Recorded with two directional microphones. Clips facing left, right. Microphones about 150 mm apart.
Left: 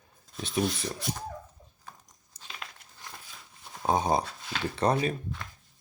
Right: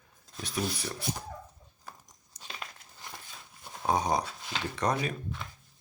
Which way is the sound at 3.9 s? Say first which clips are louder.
Left 2 dB; 25° left (ahead or behind).